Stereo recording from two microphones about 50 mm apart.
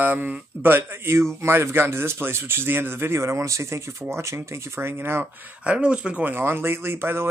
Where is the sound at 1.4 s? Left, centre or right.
Right.